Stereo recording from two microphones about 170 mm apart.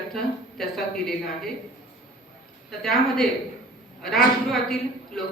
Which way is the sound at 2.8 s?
Centre (ahead or behind).